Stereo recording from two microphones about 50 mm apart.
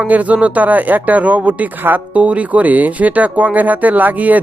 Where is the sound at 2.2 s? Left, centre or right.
Right.